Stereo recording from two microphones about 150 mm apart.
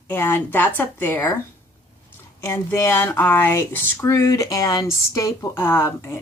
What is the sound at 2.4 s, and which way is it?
Speech, 15° left (ahead or behind).